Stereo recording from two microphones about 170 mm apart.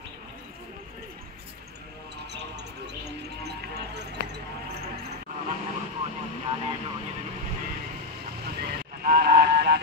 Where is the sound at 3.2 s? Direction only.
70° right (ahead or behind).